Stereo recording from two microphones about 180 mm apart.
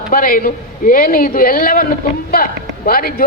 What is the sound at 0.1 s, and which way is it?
A man's voice, 50° left (ahead or behind).